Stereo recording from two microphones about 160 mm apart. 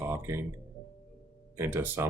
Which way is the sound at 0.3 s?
15° right (ahead or behind).